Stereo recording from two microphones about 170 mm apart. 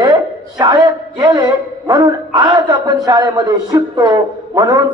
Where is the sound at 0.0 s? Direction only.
25° right (ahead or behind).